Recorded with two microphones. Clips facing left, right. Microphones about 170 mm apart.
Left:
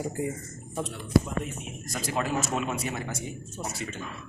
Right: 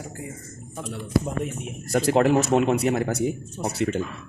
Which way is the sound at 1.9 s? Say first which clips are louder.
Right 11 dB; 65° right (ahead or behind).